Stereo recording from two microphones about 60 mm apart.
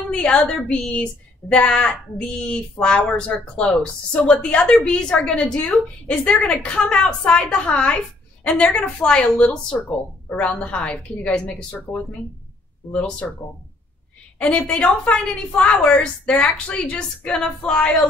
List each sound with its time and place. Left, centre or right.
0.1 s a woman's voice: centre
14.4 s a woman's voice: centre